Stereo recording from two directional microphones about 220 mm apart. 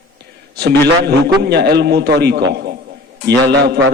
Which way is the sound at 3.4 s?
50° right (ahead or behind).